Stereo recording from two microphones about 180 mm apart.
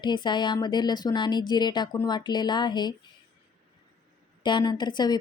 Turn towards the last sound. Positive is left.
turn(degrees=25)  # may be behind; listen again after turning